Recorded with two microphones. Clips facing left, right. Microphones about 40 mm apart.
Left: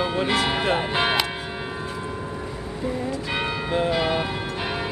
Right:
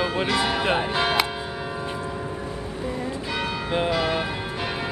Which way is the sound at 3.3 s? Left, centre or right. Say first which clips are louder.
Left 1 dB; centre.